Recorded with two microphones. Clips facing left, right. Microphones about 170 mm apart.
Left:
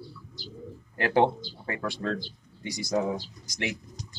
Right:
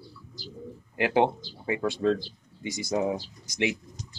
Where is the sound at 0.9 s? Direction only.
15° right (ahead or behind).